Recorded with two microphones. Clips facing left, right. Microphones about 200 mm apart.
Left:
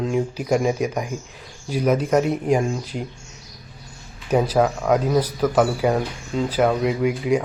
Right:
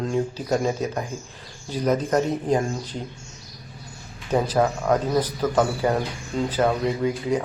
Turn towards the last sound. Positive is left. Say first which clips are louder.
# left 3 dB
turn(degrees=10)  # may be behind; listen again after turning